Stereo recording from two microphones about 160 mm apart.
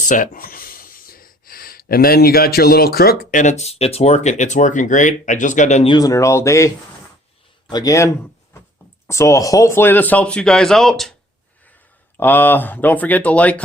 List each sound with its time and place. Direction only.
0.0 s a sound: 55° left (ahead or behind); by 3.4 s 70° left (ahead or behind)
3.4 s speech: 45° left (ahead or behind)
5.9 s speech: 20° left (ahead or behind)
7.7 s speech: 25° left (ahead or behind); by 11.1 s centre (ahead or behind)
12.1 s speech: 10° left (ahead or behind)